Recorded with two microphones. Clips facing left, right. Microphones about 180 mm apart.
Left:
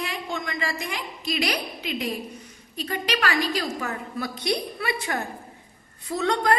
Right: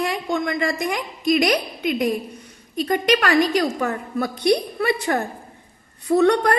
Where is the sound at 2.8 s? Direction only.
50° right (ahead or behind).